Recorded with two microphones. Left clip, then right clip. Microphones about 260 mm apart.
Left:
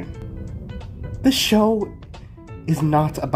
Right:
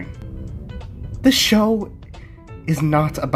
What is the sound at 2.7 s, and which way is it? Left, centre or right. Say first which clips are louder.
Speech: even; right.